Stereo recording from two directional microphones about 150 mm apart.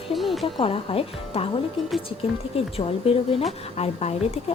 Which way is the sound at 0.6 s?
35° left (ahead or behind).